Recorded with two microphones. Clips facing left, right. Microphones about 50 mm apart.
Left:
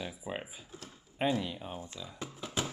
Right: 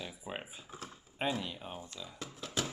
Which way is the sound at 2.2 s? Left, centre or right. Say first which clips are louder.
Left 1 dB; centre.